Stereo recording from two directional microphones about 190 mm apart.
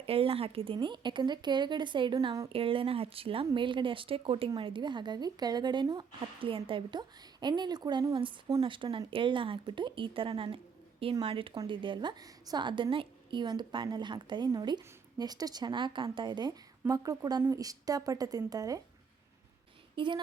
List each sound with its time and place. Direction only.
0.0 s speech: 30° right (ahead or behind)